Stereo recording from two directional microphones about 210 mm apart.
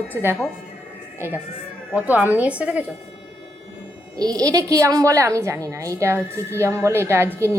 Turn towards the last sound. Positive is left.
turn(degrees=-10)  # may be behind; listen again after turning